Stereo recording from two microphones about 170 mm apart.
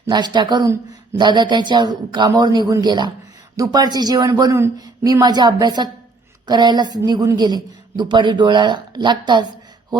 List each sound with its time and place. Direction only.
0.1 s a woman's voice: 25° right (ahead or behind)